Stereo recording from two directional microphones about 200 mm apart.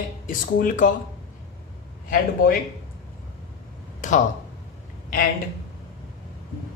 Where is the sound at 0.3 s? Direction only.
40° left (ahead or behind).